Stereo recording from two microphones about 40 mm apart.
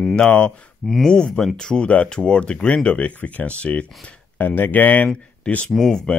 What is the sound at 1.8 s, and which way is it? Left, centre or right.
Speech, left.